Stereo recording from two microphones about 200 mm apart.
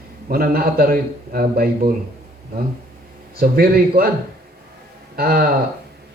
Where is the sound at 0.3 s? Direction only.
50° right (ahead or behind).